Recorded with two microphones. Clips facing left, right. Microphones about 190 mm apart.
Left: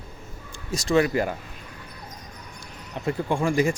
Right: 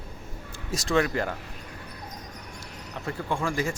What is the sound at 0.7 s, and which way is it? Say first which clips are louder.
Speech: left 4 dB; centre (ahead or behind).